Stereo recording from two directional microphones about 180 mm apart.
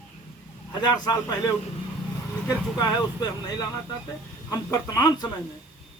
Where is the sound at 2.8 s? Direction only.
20° left (ahead or behind).